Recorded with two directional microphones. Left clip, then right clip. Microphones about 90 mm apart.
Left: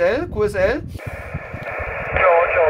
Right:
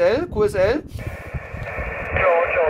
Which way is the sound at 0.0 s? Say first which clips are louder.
Even; 25° right (ahead or behind).